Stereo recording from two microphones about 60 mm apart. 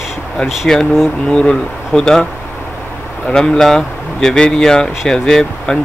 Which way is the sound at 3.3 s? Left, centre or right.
Centre.